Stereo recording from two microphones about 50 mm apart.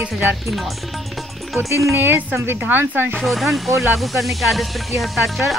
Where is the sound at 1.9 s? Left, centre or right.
Right.